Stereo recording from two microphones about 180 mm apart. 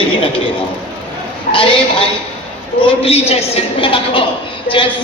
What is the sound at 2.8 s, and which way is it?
A woman's voice, 35° left (ahead or behind).